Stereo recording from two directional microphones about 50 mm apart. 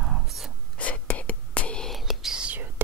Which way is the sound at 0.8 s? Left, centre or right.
Left.